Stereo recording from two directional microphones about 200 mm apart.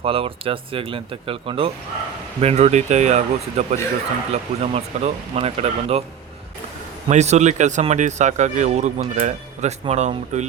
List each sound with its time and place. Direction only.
0.0 s speech: 30° right (ahead or behind)
7.1 s speech: 35° right (ahead or behind)